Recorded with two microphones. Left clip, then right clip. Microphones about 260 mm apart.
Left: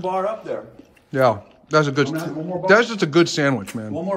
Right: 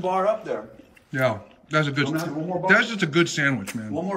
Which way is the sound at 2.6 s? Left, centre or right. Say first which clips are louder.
Left 4 dB; centre.